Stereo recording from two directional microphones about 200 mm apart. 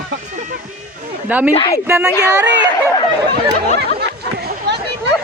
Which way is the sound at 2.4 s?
60° right (ahead or behind).